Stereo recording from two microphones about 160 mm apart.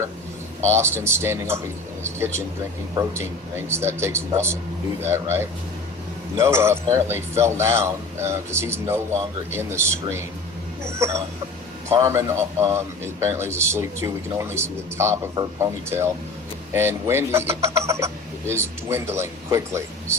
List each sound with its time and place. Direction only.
0.7 s speech: 15° right (ahead or behind)